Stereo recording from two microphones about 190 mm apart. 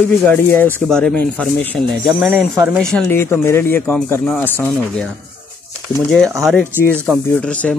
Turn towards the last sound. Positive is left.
turn(degrees=5)  # may be behind; listen again after turning